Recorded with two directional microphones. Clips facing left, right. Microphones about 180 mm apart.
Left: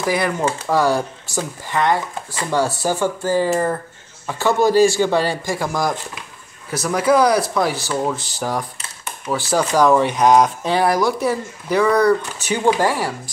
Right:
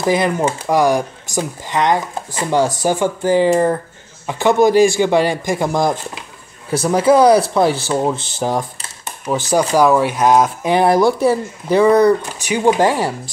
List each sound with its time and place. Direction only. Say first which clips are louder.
0.0 s speech: right 4 dB; 20° right (ahead or behind)
9.8 s speech: even; 5° right (ahead or behind)
10.7 s speech: right 4 dB; 25° right (ahead or behind)